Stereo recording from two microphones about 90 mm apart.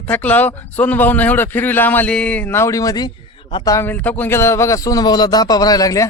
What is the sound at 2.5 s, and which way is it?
Speech, 30° left (ahead or behind).